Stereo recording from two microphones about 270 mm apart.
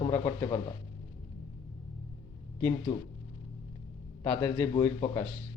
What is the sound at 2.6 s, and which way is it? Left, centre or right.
Speech, centre.